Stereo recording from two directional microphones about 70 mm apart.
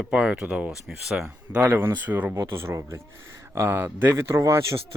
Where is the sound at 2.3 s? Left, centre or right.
Right.